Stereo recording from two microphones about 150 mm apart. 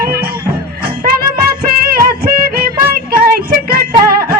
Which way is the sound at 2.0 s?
80° right.